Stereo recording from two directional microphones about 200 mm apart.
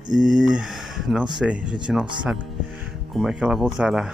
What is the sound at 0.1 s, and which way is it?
Speech, 5° right (ahead or behind).